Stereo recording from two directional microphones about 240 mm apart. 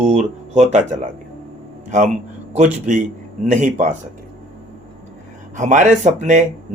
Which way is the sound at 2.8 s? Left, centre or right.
Right.